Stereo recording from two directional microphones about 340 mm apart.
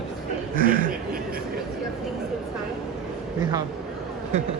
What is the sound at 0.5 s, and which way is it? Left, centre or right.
Chuckle, right.